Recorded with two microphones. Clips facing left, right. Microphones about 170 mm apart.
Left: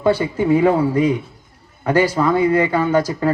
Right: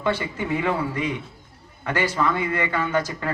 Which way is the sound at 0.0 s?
35° left (ahead or behind).